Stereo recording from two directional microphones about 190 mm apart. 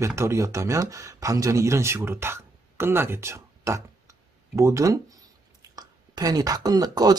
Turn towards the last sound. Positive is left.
turn(degrees=-20)  # may be behind; listen again after turning